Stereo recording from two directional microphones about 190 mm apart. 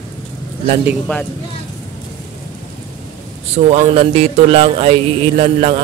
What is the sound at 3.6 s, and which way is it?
Speech, 35° right (ahead or behind).